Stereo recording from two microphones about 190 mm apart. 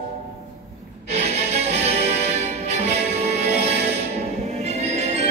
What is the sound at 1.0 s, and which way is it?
Music, 35° right (ahead or behind).